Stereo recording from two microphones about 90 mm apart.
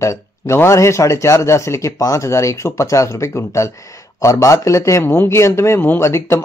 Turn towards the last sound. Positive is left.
turn(degrees=30)  # may be behind; listen again after turning